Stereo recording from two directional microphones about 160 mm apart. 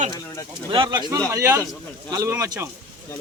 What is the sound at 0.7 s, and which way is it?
Speech, 30° right (ahead or behind).